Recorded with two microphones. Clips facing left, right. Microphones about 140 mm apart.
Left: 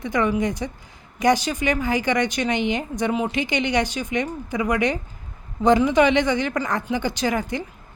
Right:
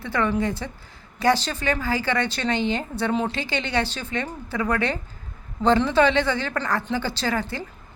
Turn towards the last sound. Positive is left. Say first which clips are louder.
# left 3 dB
turn(degrees=15)  # may be behind; listen again after turning